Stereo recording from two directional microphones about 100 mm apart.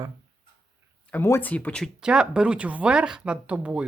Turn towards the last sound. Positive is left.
turn(degrees=-10)  # may be behind; listen again after turning